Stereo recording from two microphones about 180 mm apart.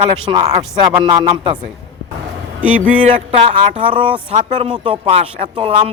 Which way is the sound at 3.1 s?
30° right (ahead or behind).